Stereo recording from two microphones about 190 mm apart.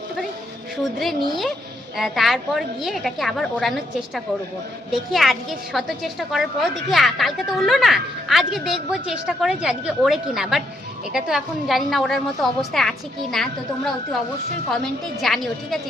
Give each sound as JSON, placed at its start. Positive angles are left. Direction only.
{"t": 2.0, "sound": "a woman's voice", "side_deg": 0}
{"t": 15.2, "sound": "a woman's voice", "side_deg": 0}